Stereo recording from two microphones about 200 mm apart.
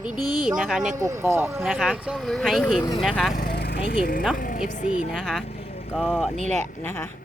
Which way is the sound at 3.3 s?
55° left (ahead or behind).